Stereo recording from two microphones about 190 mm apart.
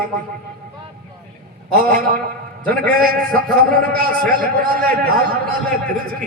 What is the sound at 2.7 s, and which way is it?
Speech, 50° right (ahead or behind).